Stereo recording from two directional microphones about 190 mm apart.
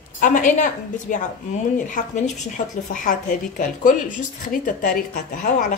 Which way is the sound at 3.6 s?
45° left (ahead or behind).